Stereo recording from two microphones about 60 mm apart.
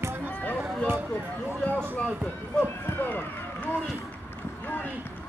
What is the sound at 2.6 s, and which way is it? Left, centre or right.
Speech, left.